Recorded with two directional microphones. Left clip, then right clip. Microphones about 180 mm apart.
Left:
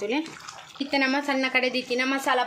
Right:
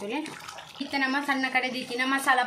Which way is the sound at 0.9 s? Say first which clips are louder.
Left 3 dB; 40° left (ahead or behind).